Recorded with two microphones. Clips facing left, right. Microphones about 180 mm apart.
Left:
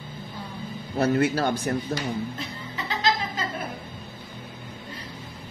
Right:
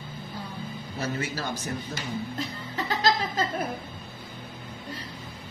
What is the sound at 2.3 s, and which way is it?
Music, 40° right (ahead or behind).